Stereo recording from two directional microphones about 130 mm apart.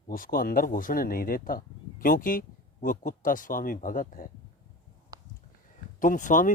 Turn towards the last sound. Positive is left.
turn(degrees=85)